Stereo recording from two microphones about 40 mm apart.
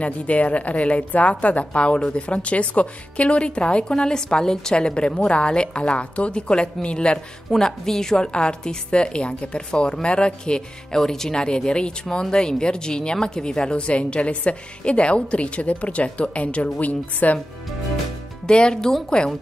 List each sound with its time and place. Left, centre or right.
0.0 s a woman's voice: left
7.5 s a woman's voice: centre
11.0 s speech: centre; by 17.4 s left
18.5 s speech: left